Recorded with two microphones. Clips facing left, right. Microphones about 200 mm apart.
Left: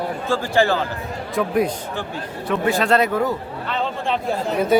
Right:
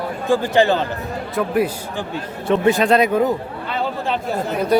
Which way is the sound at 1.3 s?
5° right (ahead or behind).